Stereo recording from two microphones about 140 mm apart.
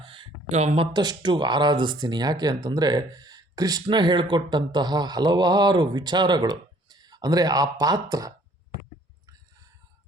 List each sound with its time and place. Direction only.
0.0 s a sound: 35° right (ahead or behind)
0.4 s speech: 50° right (ahead or behind)
0.9 s speech: 30° right (ahead or behind)